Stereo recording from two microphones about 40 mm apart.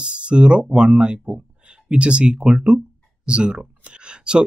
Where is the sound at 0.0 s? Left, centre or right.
Right.